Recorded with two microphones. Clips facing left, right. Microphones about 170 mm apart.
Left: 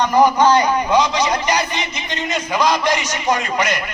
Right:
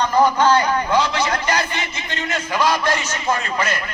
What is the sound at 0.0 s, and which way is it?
A man's voice, 15° left (ahead or behind).